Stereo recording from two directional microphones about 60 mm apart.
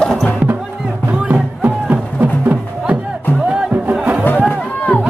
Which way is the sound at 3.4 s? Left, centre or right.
Centre.